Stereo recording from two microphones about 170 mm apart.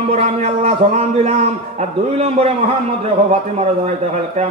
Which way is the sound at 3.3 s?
40° right (ahead or behind).